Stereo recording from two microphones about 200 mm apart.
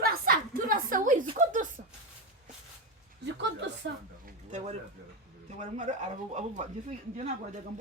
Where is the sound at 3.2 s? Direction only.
60° right (ahead or behind).